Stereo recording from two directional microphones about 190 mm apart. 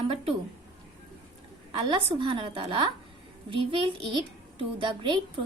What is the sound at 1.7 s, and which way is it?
A woman's voice, 25° right (ahead or behind).